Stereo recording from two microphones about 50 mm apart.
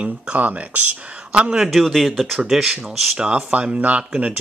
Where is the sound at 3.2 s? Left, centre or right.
Centre.